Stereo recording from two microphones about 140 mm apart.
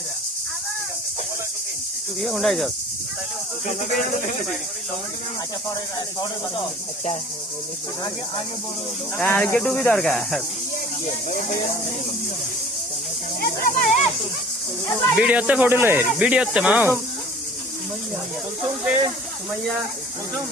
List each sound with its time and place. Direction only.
2.2 s speech: centre (ahead or behind)
9.1 s speech: 10° left (ahead or behind)
11.0 s speech: 65° left (ahead or behind)
13.4 s a sound: 85° left
15.1 s speech: 5° right (ahead or behind)